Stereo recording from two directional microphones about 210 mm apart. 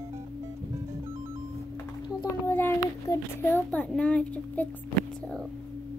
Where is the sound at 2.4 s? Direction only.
10° left (ahead or behind).